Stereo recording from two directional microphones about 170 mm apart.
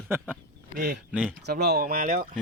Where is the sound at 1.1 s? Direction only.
5° right (ahead or behind).